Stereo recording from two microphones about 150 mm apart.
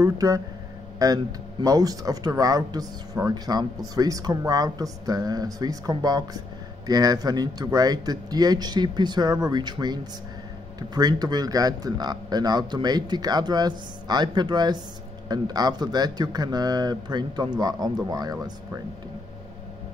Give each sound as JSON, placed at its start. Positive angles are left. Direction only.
{"t": 0.0, "sound": "a man's voice", "side_deg": -20}